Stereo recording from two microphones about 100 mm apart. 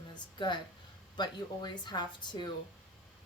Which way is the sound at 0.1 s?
50° left (ahead or behind).